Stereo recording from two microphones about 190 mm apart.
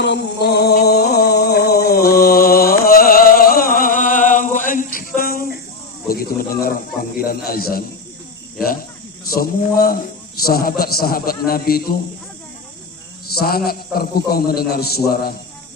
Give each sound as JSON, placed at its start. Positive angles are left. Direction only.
{"t": 0.0, "sound": "music", "side_deg": 65}
{"t": 6.1, "sound": "snake", "side_deg": 50}
{"t": 7.3, "sound": "a man's voice", "side_deg": 50}
{"t": 9.3, "sound": "a man's voice", "side_deg": 50}
{"t": 13.2, "sound": "a man's voice", "side_deg": 55}